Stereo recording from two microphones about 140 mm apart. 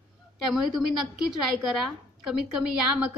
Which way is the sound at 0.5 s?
Centre (ahead or behind).